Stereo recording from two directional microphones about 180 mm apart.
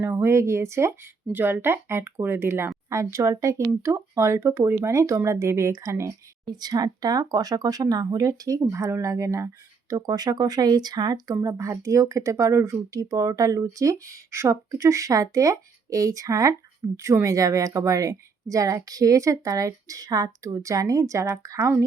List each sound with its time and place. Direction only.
0.0 s speech: 15° right (ahead or behind)